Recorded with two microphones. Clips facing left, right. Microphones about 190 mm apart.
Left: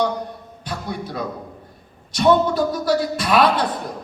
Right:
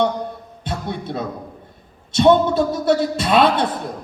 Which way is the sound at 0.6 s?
25° right (ahead or behind).